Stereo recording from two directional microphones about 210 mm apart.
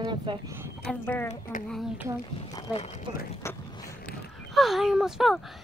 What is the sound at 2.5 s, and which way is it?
Speech, 25° left (ahead or behind).